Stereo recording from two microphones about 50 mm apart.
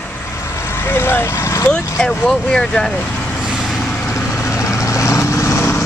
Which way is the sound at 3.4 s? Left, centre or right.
Centre.